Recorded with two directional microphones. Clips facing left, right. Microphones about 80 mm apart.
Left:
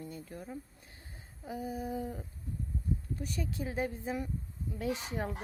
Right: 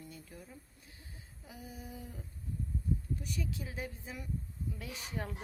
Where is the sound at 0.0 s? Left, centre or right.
Left.